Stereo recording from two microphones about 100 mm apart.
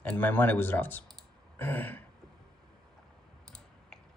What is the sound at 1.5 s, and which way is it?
Throat clearing, 20° left (ahead or behind).